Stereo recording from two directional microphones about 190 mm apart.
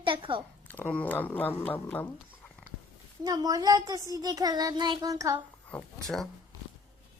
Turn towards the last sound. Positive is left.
turn(degrees=0)  # may be behind; listen again after turning